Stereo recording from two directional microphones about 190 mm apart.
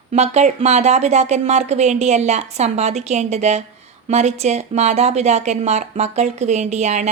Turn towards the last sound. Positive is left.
turn(degrees=-35)  # may be behind; listen again after turning